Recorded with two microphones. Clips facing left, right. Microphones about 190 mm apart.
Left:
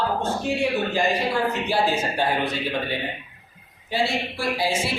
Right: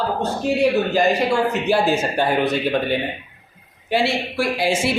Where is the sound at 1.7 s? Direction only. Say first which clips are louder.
Right 5 dB; 50° right (ahead or behind).